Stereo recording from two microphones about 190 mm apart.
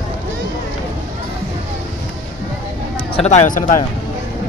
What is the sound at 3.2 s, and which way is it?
Speech, 35° left (ahead or behind).